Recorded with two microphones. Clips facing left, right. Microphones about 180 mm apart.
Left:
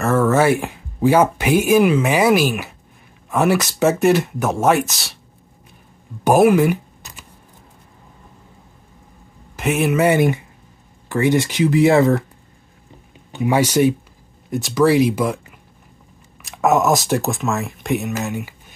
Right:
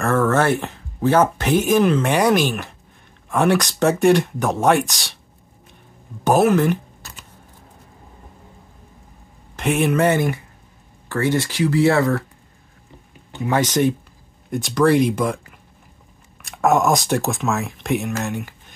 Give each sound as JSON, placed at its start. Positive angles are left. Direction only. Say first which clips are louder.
{"t": 0.0, "sound": "speech", "louder": "left 2 dB", "side_deg": 5}
{"t": 6.2, "sound": "speech", "louder": "left 3 dB", "side_deg": 10}
{"t": 9.6, "sound": "speech", "louder": "left 1 dB", "side_deg": 0}
{"t": 13.3, "sound": "speech", "louder": "left 3 dB", "side_deg": 15}
{"t": 16.4, "sound": "speech", "louder": "left 1 dB", "side_deg": 0}